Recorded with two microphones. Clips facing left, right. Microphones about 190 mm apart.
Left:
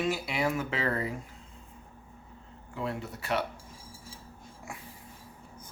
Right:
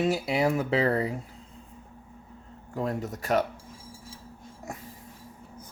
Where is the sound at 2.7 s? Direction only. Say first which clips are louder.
Right 5 dB; 40° right (ahead or behind).